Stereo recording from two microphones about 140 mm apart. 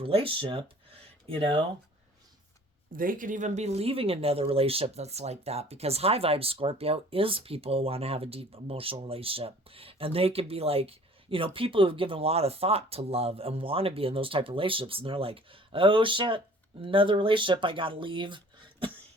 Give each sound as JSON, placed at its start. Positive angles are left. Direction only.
{"t": 0.0, "sound": "speech", "side_deg": -40}
{"t": 2.9, "sound": "speech", "side_deg": -85}